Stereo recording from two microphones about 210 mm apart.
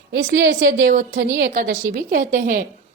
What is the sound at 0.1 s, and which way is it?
A woman's voice, 55° right (ahead or behind).